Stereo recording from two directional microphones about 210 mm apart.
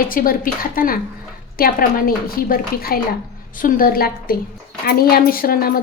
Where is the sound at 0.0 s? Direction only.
45° left (ahead or behind).